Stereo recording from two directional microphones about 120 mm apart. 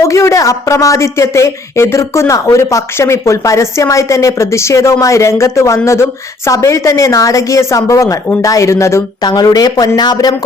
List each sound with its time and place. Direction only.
0.0 s speech: 25° left (ahead or behind)
9.2 s speech: 35° left (ahead or behind)